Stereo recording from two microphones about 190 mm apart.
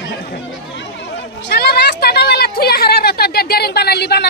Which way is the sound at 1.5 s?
55° left (ahead or behind).